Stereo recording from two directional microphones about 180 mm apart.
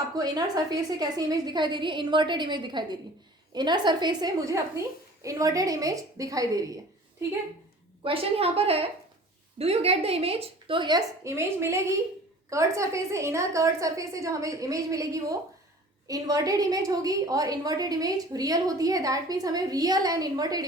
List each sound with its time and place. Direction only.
0.2 s a woman's voice: 20° right (ahead or behind)
8.0 s a woman's voice: 30° right (ahead or behind)